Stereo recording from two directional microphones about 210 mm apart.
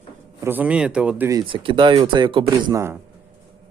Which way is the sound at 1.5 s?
25° right (ahead or behind).